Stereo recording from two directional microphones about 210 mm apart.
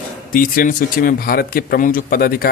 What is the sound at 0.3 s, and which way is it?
Speech, 40° left (ahead or behind).